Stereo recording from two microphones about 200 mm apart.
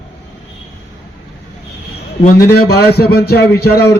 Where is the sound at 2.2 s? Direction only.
45° left (ahead or behind).